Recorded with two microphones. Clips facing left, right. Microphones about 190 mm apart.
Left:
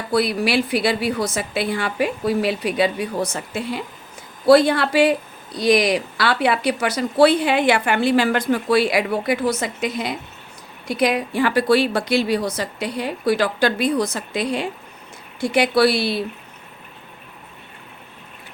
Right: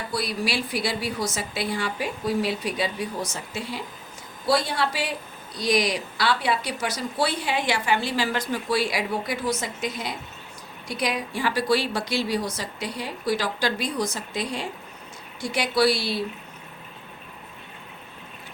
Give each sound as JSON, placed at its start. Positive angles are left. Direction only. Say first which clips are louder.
{"t": 0.1, "sound": "speech", "louder": "left 10 dB", "side_deg": 60}